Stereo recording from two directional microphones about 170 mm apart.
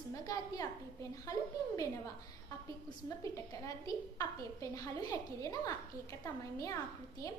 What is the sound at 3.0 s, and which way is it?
A woman's voice, 20° left (ahead or behind).